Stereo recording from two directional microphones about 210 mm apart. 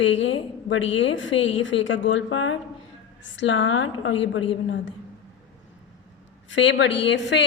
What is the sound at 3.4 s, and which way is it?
A woman's voice, 60° left (ahead or behind).